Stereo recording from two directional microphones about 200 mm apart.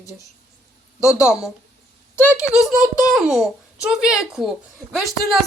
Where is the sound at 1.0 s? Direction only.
5° right (ahead or behind).